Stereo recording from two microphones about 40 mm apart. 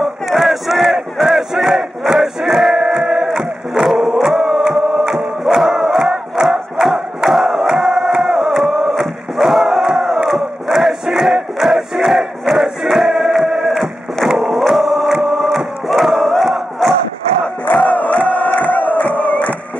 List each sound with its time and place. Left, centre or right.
0.3 s battle cry: centre
1.7 s battle cry: centre
2.1 s crowd: centre
5.6 s crowd: centre
11.6 s music: centre
14.4 s a sound: centre
15.1 s crowd: centre
17.8 s crowd: left